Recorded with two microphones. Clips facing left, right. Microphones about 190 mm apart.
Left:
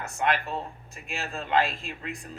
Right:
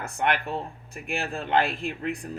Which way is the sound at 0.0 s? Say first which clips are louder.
Right 1 dB; 60° right (ahead or behind).